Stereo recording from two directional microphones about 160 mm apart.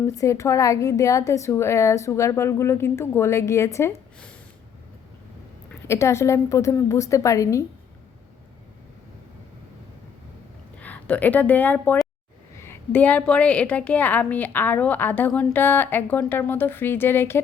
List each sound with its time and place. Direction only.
0.0 s a woman's voice: 20° left (ahead or behind)
5.9 s a woman's voice: 15° left (ahead or behind)
10.8 s a woman's voice: 10° left (ahead or behind)